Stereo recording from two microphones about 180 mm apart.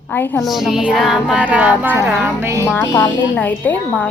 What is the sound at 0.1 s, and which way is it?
Speech, 10° left (ahead or behind).